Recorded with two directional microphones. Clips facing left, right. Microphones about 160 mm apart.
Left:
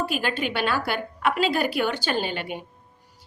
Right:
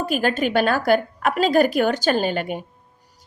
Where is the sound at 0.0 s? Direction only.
45° right (ahead or behind).